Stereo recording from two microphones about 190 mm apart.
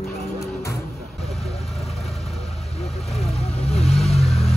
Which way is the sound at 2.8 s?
35° left (ahead or behind).